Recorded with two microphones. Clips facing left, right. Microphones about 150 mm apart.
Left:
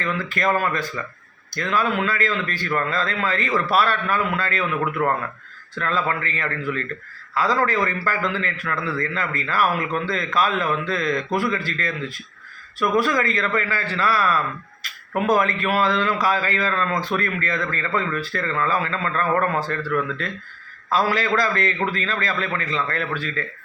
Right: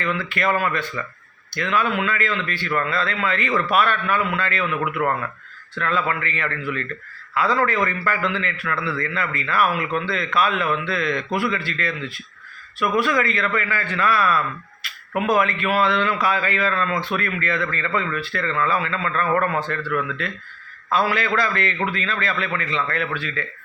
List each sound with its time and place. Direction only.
0.0 s a man's voice: 40° left (ahead or behind)